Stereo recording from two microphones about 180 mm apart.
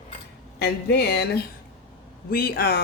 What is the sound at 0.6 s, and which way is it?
Speech, 65° left (ahead or behind).